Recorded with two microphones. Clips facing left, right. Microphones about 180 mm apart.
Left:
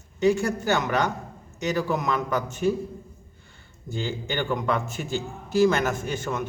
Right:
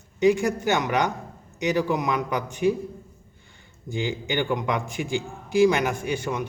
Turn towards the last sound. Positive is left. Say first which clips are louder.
# right 1 dB
turn(degrees=-15)  # may be behind; listen again after turning